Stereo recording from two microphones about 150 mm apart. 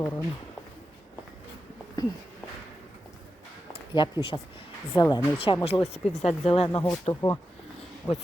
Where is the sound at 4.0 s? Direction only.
35° left (ahead or behind).